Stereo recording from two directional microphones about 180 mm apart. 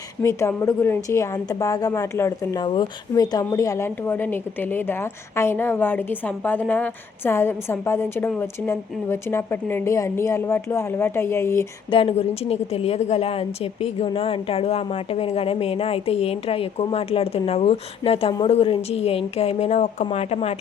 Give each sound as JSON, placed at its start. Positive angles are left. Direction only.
{"t": 0.2, "sound": "a woman's voice", "side_deg": 15}
{"t": 11.9, "sound": "a woman's voice", "side_deg": 30}